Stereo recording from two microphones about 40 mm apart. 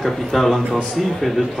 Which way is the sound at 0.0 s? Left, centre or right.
Centre.